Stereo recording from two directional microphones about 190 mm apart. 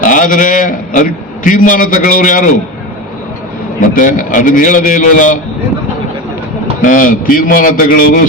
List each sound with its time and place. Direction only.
0.0 s a man's voice: 45° left (ahead or behind)
3.8 s a man's voice: 45° left (ahead or behind)
6.8 s a man's voice: 45° left (ahead or behind)